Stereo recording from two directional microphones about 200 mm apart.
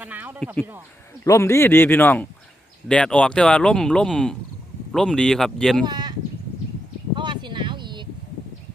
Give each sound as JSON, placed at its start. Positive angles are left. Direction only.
{"t": 0.0, "sound": "speech", "side_deg": -10}
{"t": 1.2, "sound": "speech", "side_deg": 15}
{"t": 5.8, "sound": "speech", "side_deg": -20}
{"t": 7.2, "sound": "a sound", "side_deg": -25}